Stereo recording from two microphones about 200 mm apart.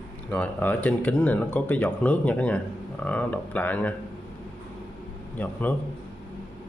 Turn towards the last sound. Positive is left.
turn(degrees=10)  # may be behind; listen again after turning